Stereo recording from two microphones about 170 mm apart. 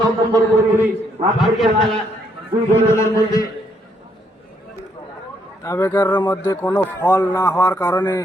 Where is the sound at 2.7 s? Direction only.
15° left (ahead or behind).